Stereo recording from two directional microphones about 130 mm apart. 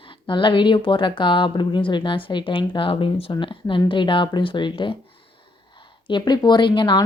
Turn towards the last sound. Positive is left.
turn(degrees=40)  # may be behind; listen again after turning